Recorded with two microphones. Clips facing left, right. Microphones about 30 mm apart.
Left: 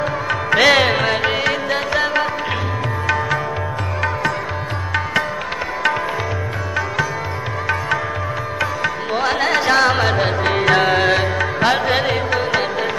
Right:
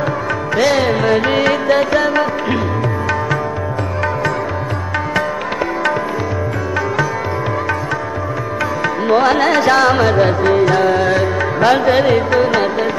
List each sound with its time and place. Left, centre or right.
0.5 s music: left
1.3 s music: centre
2.0 s carnatic music: centre
8.8 s music: centre
9.6 s carnatic music: centre
10.4 s music: left
11.3 s music: centre